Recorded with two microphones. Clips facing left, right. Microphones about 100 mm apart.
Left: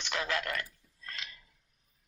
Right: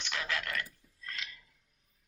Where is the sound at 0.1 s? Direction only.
30° left (ahead or behind).